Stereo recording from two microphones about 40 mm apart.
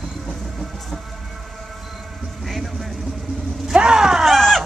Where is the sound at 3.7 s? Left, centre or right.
Right.